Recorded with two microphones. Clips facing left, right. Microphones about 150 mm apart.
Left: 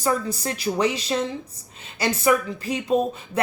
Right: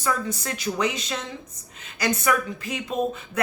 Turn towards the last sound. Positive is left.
turn(degrees=35)  # may be behind; listen again after turning